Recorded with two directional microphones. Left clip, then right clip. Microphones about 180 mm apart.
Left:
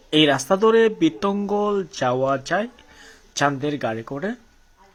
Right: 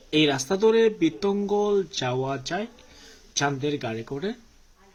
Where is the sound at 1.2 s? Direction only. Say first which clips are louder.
Left 2 dB; 15° left (ahead or behind).